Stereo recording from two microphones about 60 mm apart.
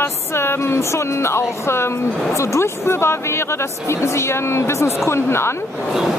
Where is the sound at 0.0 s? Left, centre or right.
Left.